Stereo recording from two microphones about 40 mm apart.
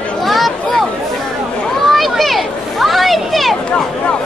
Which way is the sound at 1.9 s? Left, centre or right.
Centre.